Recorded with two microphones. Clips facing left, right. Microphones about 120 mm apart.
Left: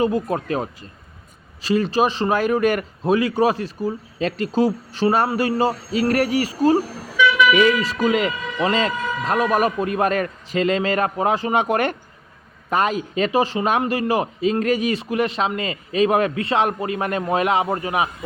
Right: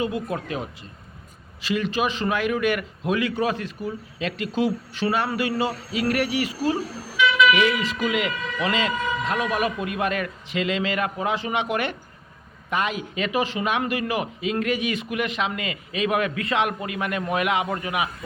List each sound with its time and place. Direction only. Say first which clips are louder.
0.0 s a man's voice: left 6 dB; 40° left (ahead or behind)